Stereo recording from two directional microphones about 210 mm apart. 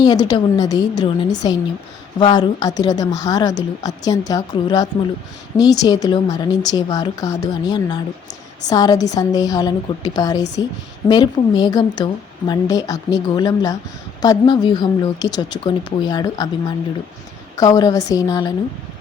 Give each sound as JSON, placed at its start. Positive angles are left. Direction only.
{"t": 0.0, "sound": "a woman's voice", "side_deg": 20}